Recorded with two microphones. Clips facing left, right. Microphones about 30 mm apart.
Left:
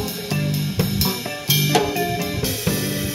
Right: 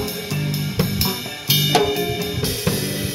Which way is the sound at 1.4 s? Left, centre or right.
Right.